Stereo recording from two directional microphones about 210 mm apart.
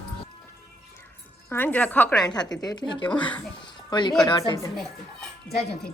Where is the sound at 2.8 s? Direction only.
20° left (ahead or behind).